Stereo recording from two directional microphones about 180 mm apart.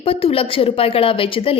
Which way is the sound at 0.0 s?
30° left (ahead or behind).